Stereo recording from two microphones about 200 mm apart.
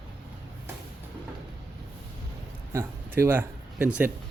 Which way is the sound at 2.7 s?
10° right (ahead or behind).